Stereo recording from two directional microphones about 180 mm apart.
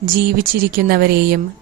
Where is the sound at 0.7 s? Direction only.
55° right (ahead or behind).